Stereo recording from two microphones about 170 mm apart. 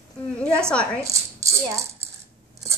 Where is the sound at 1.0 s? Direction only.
20° right (ahead or behind).